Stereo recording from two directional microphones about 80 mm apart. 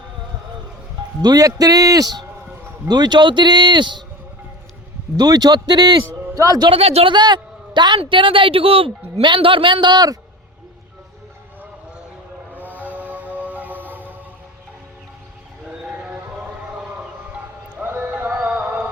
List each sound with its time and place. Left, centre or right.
1.2 s a man's voice: right
2.8 s a woman's voice: right
5.1 s a man's voice: right
12.5 s music: right
17.8 s music: right